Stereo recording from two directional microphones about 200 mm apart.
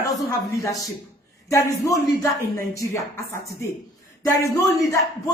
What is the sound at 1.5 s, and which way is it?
A woman's voice, 15° left (ahead or behind).